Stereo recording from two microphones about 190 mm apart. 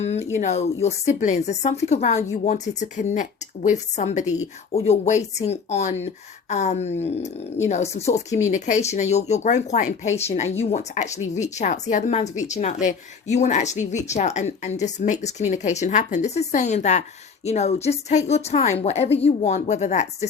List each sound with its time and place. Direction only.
0.0 s speech: 35° left (ahead or behind)